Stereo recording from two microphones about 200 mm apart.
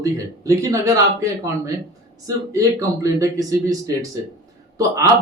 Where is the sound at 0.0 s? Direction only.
15° right (ahead or behind).